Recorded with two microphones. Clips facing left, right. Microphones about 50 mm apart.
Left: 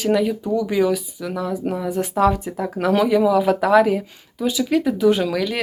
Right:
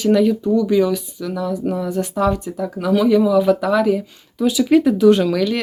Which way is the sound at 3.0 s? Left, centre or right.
Centre.